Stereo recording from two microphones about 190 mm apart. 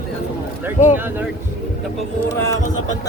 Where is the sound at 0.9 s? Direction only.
10° right (ahead or behind).